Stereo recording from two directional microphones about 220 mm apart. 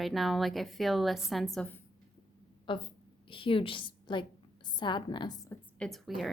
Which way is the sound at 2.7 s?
20° left (ahead or behind).